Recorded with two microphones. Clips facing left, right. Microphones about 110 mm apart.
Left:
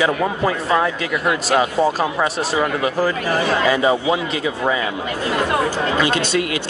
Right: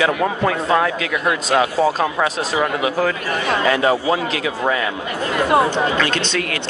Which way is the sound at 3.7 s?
Centre (ahead or behind).